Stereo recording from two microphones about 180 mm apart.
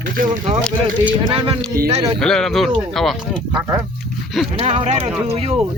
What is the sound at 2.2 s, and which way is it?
Speech, 5° left (ahead or behind).